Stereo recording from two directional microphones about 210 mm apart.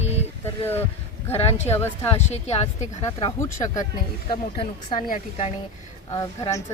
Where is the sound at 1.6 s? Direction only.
10° left (ahead or behind).